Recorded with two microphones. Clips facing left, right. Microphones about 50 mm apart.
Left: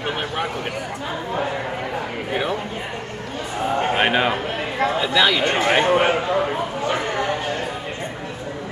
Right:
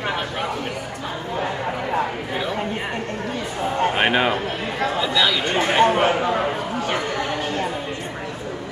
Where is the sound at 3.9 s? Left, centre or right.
Centre.